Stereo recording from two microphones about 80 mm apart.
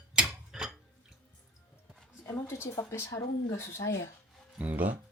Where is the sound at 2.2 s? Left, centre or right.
Left.